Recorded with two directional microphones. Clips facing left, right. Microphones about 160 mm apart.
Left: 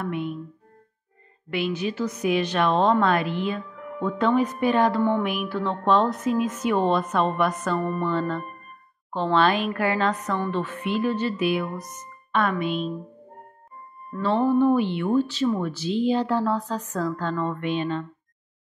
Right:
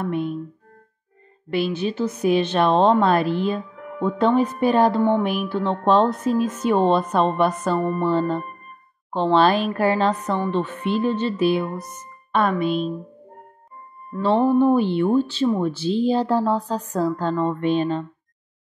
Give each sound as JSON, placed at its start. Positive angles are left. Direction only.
{"t": 0.0, "sound": "a woman's voice", "side_deg": -35}
{"t": 1.5, "sound": "a woman's voice", "side_deg": -30}
{"t": 14.6, "sound": "a woman's voice", "side_deg": -35}